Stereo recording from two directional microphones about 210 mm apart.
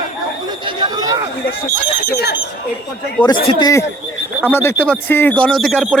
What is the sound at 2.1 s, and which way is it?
Speech, 50° left (ahead or behind).